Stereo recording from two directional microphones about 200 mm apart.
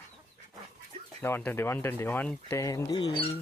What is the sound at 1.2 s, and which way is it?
Speech, 10° left (ahead or behind).